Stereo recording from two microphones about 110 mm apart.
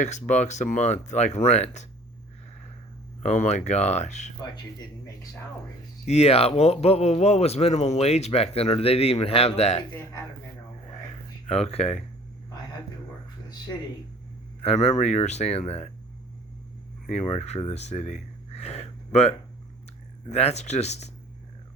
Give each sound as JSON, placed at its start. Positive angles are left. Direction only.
{"t": 0.3, "sound": "speech", "side_deg": 90}
{"t": 3.2, "sound": "speech", "side_deg": 90}
{"t": 6.1, "sound": "speech", "side_deg": 70}
{"t": 11.4, "sound": "speech", "side_deg": 70}
{"t": 14.6, "sound": "speech", "side_deg": 80}
{"t": 17.1, "sound": "speech", "side_deg": 80}
{"t": 20.3, "sound": "speech", "side_deg": 85}